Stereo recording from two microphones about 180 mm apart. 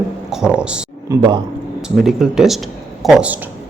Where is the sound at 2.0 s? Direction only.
5° right (ahead or behind).